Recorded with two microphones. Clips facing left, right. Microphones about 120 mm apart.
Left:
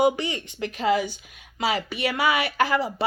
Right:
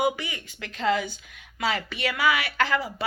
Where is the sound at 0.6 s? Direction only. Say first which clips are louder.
Left 2 dB; 15° left (ahead or behind).